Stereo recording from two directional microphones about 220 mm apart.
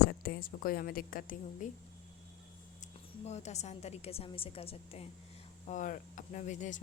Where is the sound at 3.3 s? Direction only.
30° left (ahead or behind).